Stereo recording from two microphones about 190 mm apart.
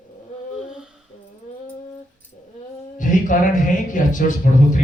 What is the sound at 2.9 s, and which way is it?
A man's voice, 45° left (ahead or behind).